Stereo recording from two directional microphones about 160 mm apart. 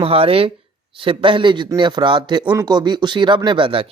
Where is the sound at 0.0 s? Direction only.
35° right (ahead or behind).